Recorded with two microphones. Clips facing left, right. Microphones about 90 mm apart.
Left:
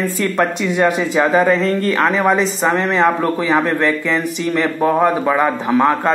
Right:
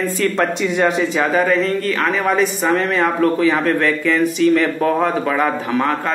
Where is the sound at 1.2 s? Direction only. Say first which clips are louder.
Left 4 dB; 20° left (ahead or behind).